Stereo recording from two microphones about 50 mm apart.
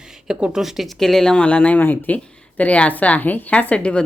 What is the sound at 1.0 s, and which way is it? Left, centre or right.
Speech, centre.